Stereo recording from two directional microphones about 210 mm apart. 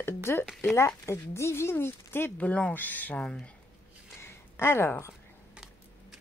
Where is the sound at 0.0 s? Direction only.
10° left (ahead or behind).